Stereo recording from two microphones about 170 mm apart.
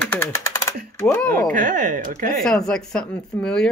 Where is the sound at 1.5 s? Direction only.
50° right (ahead or behind).